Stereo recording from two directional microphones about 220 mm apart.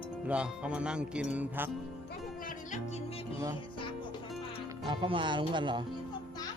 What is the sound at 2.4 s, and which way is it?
Music, 35° left (ahead or behind).